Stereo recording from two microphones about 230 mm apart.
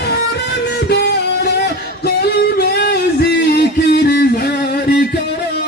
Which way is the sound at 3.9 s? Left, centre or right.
Left.